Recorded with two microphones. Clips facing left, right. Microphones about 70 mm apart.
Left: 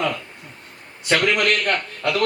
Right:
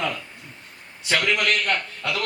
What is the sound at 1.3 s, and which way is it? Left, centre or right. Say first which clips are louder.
Speech: left 3 dB; left.